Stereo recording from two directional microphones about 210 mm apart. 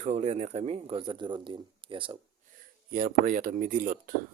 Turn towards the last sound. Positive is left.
turn(degrees=-40)  # may be behind; listen again after turning